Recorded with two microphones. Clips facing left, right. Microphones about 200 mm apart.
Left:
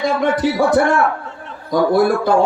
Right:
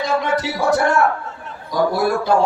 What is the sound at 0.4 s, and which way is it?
Speech, 50° left (ahead or behind).